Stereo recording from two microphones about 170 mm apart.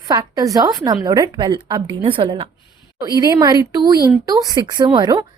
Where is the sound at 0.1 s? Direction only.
20° right (ahead or behind).